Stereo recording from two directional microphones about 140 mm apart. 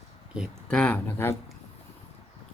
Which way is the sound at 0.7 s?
10° left (ahead or behind).